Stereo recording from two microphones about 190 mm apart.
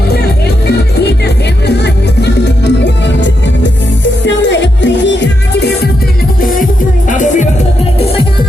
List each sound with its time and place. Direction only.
1.6 s music: 60° left (ahead or behind)
7.1 s music: 40° left (ahead or behind)